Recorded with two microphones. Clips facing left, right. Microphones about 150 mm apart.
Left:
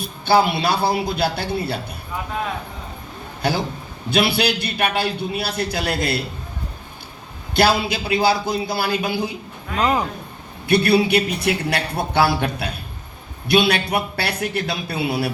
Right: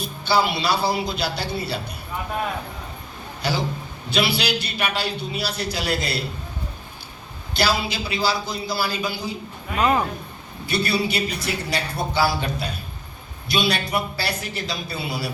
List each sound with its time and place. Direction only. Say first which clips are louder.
0.3 s a man's voice: left 4 dB; 55° left (ahead or behind)
3.4 s a man's voice: left 3 dB; 55° left (ahead or behind)
7.5 s a man's voice: left 5 dB; 55° left (ahead or behind)
10.7 s a man's voice: left 7 dB; 60° left (ahead or behind)